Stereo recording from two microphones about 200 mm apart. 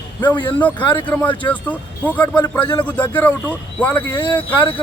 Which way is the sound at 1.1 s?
10° left (ahead or behind).